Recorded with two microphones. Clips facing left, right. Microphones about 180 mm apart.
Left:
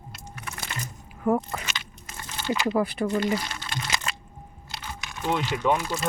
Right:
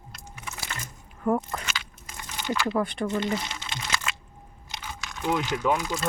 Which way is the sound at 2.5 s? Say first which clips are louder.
Left 2 dB; 15° left (ahead or behind).